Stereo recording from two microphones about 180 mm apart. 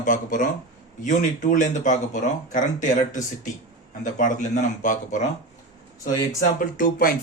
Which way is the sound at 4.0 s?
45° left (ahead or behind).